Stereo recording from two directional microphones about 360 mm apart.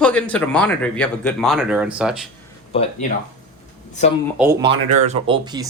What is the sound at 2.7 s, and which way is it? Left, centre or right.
Speech, centre.